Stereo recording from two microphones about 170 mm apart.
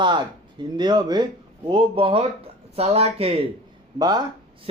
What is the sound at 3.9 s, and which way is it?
Speech, 25° right (ahead or behind).